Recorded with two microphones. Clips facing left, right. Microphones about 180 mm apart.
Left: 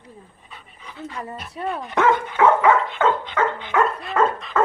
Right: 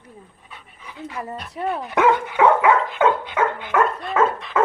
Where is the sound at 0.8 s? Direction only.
15° right (ahead or behind).